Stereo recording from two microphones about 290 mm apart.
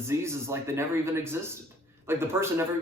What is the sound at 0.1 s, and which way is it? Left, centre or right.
Speech, centre.